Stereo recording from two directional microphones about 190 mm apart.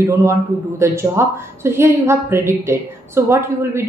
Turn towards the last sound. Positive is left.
turn(degrees=-15)  # may be behind; listen again after turning